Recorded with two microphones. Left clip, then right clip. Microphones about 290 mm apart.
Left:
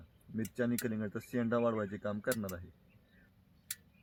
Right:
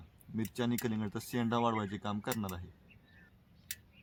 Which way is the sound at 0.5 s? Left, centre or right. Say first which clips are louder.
Left 1 dB; right.